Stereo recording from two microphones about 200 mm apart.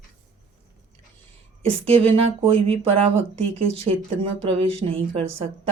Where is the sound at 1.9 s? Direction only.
30° right (ahead or behind).